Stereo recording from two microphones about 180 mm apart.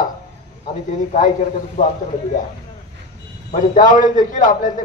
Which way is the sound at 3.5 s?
45° left (ahead or behind).